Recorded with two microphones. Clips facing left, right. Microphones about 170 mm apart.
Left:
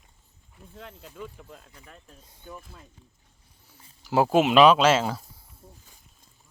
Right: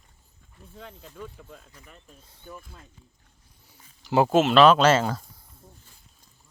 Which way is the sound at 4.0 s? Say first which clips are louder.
Right 1 dB; 5° left (ahead or behind).